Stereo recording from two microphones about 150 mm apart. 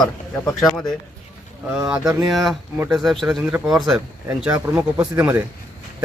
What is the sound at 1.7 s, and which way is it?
Speech, 5° right (ahead or behind).